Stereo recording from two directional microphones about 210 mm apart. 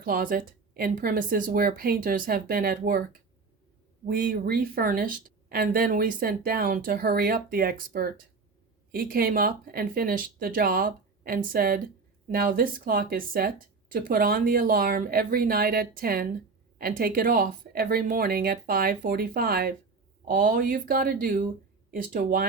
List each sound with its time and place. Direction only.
0.0 s a woman's voice: 40° right (ahead or behind)